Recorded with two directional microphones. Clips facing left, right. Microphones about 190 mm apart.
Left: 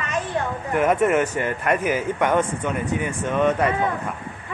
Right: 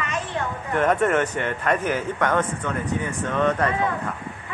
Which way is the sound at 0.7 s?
10° left (ahead or behind).